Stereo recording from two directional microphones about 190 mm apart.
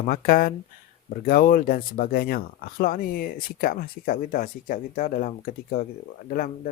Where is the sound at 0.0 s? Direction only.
50° left (ahead or behind).